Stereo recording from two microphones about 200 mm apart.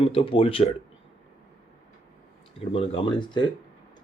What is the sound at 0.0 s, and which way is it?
Speech, 30° left (ahead or behind).